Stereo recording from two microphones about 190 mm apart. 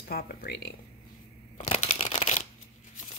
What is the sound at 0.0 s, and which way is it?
Speech, 55° left (ahead or behind).